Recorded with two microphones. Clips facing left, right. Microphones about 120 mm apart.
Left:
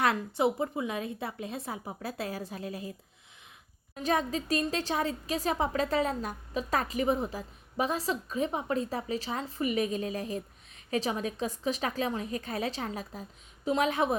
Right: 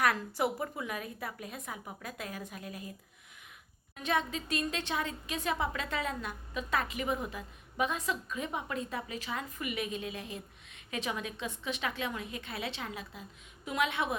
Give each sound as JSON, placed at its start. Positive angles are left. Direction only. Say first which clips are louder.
{"t": 0.0, "sound": "a woman's voice", "louder": "left 3 dB", "side_deg": 25}
{"t": 3.9, "sound": "speech", "louder": "left 4 dB", "side_deg": 35}